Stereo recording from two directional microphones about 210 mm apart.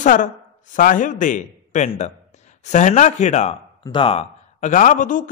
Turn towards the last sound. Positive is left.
turn(degrees=40)  # may be behind; listen again after turning